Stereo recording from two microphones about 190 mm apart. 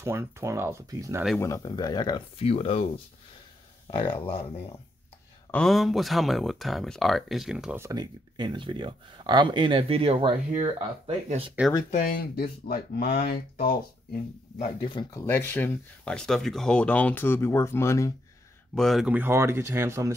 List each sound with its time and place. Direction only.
0.0 s speech: 15° right (ahead or behind)
1.4 s speech: 20° left (ahead or behind)
5.5 s speech: 5° left (ahead or behind)
7.8 s speech: 20° right (ahead or behind)
12.1 s speech: 50° left (ahead or behind)
14.6 s speech: 25° left (ahead or behind)
15.2 s speech: 10° left (ahead or behind)
18.8 s speech: centre (ahead or behind)